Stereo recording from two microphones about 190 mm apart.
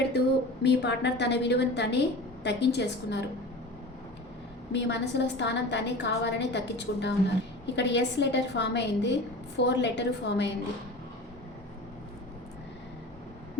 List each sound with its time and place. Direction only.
0.1 s a sound: 60° left (ahead or behind)
0.6 s a woman's voice: 65° left (ahead or behind)
4.7 s a woman's voice: 65° left (ahead or behind)